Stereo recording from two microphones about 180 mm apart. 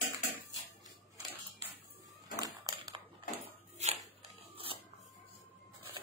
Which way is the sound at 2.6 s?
25° right (ahead or behind).